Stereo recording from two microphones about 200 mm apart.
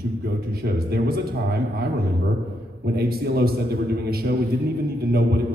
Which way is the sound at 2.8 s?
50° right (ahead or behind).